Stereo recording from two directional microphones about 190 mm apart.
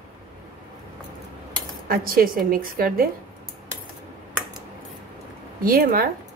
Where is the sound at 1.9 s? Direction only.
50° right (ahead or behind).